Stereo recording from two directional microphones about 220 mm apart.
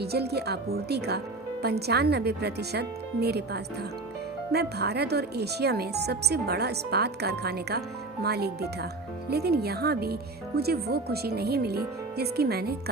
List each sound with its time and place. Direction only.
0.0 s speech: 45° right (ahead or behind)